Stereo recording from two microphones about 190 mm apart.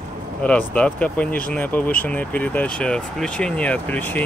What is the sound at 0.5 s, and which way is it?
Speech, 5° left (ahead or behind).